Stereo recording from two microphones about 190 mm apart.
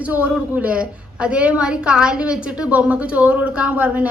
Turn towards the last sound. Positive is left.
turn(degrees=-10)  # may be behind; listen again after turning